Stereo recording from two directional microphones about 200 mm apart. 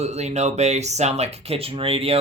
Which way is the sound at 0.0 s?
35° right (ahead or behind).